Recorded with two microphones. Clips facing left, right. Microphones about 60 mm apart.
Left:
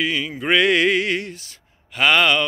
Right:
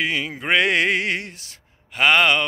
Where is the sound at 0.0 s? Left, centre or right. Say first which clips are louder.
Left 1 dB; right.